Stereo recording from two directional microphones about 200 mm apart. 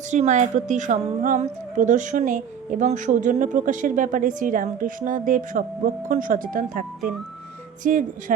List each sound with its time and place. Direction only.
0.1 s a woman's voice: 35° right (ahead or behind)
7.9 s a woman's voice: 40° right (ahead or behind)